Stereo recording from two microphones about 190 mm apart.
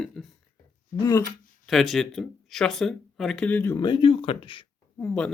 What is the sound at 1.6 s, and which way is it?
Speech, centre (ahead or behind).